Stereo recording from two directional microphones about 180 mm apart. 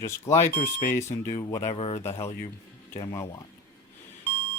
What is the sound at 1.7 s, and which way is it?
Speech, 35° left (ahead or behind).